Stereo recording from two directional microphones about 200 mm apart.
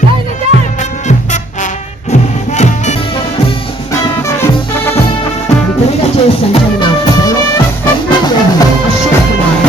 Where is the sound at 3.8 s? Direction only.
15° left (ahead or behind).